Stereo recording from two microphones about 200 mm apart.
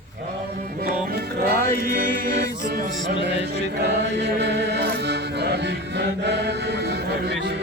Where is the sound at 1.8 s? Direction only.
45° right (ahead or behind).